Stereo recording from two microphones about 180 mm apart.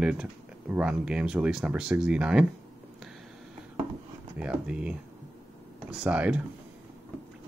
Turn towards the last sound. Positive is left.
turn(degrees=-5)  # may be behind; listen again after turning